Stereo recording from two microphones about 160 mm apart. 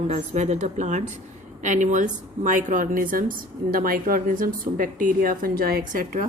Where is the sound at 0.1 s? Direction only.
45° right (ahead or behind).